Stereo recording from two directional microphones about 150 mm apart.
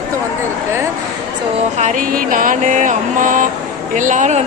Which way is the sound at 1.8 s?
65° right (ahead or behind).